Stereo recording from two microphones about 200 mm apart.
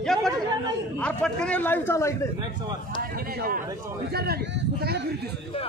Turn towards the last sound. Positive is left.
turn(degrees=-50)  # may be behind; listen again after turning